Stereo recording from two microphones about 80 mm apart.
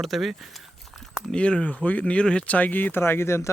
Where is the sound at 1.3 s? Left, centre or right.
Centre.